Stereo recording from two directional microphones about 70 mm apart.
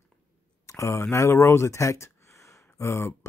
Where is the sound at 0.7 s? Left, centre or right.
Left.